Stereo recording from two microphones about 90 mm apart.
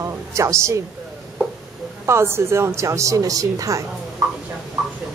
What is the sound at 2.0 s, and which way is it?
A woman's voice, 30° right (ahead or behind).